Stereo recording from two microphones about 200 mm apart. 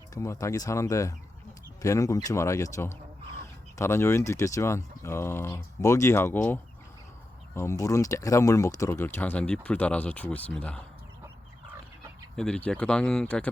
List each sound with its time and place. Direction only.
0.1 s speech: 15° left (ahead or behind)
12.4 s speech: 5° left (ahead or behind)